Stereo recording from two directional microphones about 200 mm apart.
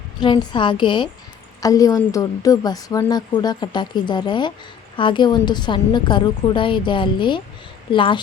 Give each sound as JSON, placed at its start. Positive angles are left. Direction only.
{"t": 0.2, "sound": "a woman's voice", "side_deg": 20}